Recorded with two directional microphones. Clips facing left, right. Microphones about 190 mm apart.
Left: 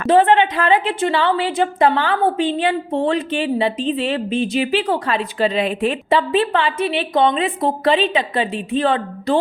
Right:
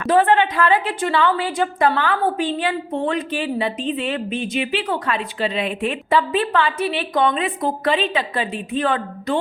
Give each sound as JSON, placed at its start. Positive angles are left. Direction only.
{"t": 0.1, "sound": "a woman's voice", "side_deg": 25}
{"t": 6.1, "sound": "a woman's voice", "side_deg": 25}